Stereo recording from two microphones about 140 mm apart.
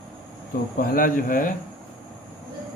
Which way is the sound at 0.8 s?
85° left.